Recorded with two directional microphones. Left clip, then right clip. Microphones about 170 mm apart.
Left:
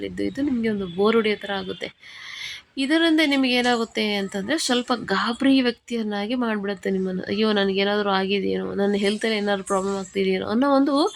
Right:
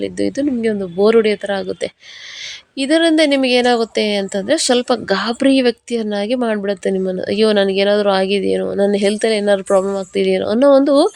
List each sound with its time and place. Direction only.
0.0 s speech: 40° right (ahead or behind)